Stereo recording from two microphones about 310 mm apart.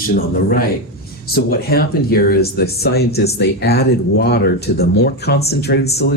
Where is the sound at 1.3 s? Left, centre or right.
Left.